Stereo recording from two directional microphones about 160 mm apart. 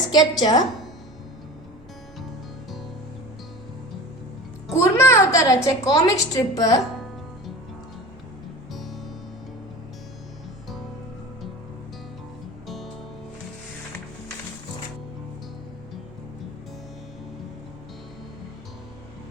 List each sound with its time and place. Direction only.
0.1 s a woman's voice: 25° left (ahead or behind)
4.8 s a woman's voice: 20° left (ahead or behind)
8.7 s music: centre (ahead or behind)
12.6 s music: centre (ahead or behind)